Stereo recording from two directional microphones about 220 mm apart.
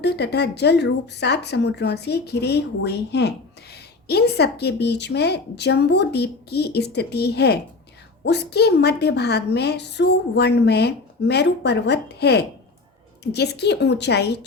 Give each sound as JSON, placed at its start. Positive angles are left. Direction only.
{"t": 0.0, "sound": "speech", "side_deg": 50}